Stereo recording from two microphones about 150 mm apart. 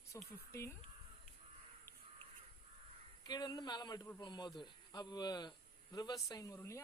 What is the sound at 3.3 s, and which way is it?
Speech, 25° left (ahead or behind).